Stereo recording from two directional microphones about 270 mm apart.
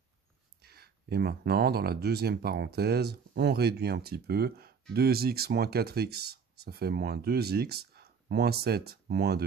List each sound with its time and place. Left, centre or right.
0.7 s speech: right